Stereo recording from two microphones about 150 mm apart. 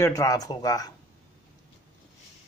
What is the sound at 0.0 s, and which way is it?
Speech, 25° left (ahead or behind).